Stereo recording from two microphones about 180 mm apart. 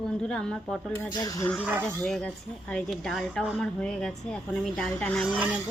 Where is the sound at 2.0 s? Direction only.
5° left (ahead or behind).